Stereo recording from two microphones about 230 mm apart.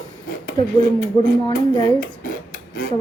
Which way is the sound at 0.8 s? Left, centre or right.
Left.